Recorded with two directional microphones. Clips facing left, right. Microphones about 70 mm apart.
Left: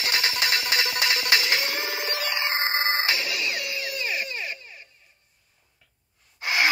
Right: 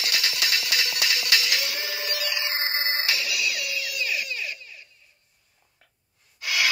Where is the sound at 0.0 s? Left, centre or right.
Left.